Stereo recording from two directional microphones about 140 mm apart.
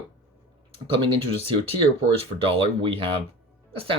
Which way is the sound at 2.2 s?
40° right (ahead or behind).